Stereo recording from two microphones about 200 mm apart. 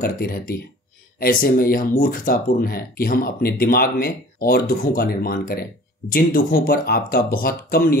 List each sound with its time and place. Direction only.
0.0 s speech: 45° left (ahead or behind)